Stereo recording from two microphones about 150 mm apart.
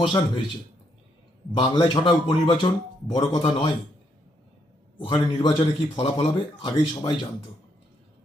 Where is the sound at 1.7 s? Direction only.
35° left (ahead or behind).